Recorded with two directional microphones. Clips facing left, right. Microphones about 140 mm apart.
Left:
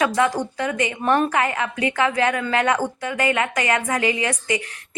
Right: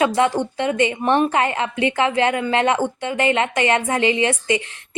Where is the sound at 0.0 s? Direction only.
25° right (ahead or behind).